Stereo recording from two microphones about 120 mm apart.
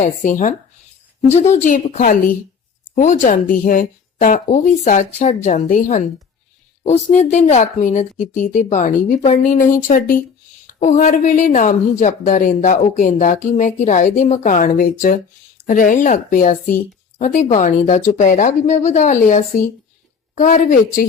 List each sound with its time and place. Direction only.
0.0 s speech: 90° left
1.5 s speech: 90° left
6.8 s speech: 70° left (ahead or behind)
7.5 s speech: 85° left